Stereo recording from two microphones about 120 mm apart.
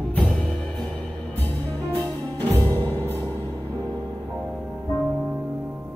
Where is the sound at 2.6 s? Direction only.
30° right (ahead or behind).